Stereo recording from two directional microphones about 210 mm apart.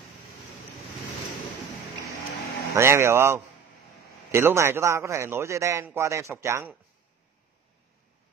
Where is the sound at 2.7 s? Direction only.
10° right (ahead or behind).